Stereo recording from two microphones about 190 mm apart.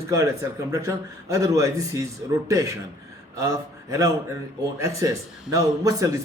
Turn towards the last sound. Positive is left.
turn(degrees=-15)  # may be behind; listen again after turning